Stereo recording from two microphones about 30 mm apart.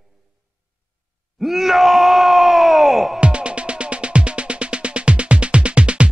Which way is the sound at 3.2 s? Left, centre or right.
Right.